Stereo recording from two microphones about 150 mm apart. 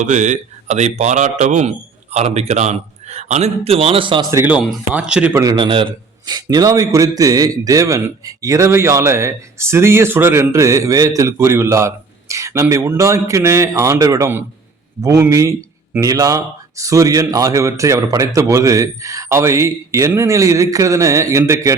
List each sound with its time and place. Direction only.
0.0 s a man's voice: 55° right (ahead or behind); by 4.3 s 35° right (ahead or behind)
4.4 s speech: 10° right (ahead or behind)
5.3 s a man's voice: 20° right (ahead or behind)
5.5 s a man's voice: 35° right (ahead or behind)